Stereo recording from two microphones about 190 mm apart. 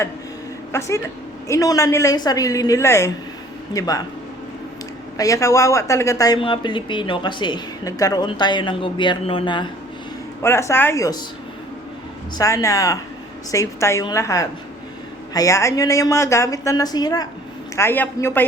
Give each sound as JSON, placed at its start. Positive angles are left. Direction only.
{"t": 0.7, "sound": "a woman's voice", "side_deg": 15}
{"t": 5.1, "sound": "speech", "side_deg": 20}
{"t": 10.4, "sound": "a woman's voice", "side_deg": 15}
{"t": 12.4, "sound": "a woman's voice", "side_deg": 15}